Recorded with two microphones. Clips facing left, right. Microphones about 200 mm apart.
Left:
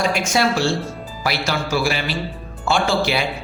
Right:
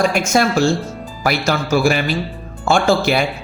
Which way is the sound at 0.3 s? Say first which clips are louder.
Right 4 dB; 45° right (ahead or behind).